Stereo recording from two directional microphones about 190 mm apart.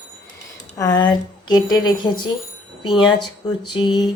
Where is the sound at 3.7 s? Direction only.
20° left (ahead or behind).